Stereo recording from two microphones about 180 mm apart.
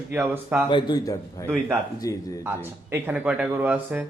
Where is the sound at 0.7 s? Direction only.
25° left (ahead or behind).